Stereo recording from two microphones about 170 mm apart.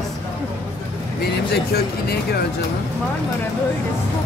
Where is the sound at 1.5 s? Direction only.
70° left (ahead or behind).